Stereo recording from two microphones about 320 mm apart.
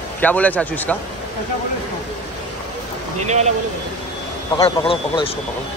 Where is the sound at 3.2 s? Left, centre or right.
Right.